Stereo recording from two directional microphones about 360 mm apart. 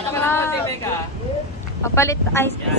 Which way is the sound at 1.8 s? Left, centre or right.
Centre.